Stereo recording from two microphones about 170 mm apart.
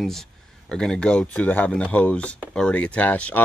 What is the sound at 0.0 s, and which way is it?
Speech, centre (ahead or behind).